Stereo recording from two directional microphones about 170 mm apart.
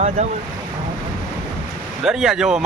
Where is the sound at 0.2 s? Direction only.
40° right (ahead or behind).